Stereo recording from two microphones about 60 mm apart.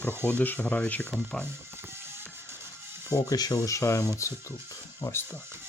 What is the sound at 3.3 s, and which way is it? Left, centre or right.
Speech, left.